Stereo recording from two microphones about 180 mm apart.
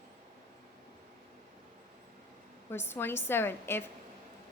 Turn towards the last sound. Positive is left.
turn(degrees=10)  # may be behind; listen again after turning